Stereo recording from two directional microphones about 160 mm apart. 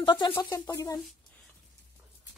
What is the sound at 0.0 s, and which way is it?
Speech, 30° left (ahead or behind).